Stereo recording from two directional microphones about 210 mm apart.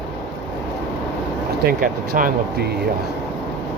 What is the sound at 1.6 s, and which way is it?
Speech, 45° right (ahead or behind).